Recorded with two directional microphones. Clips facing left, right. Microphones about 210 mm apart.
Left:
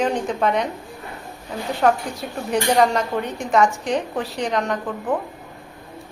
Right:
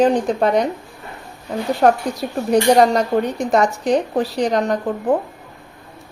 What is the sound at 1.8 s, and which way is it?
Speech, 40° right (ahead or behind).